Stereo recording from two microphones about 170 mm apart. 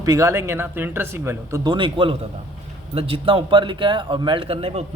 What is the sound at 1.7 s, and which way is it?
A man's voice, 30° right (ahead or behind).